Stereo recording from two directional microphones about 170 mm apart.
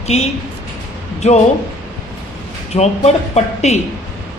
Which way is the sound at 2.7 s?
40° left (ahead or behind).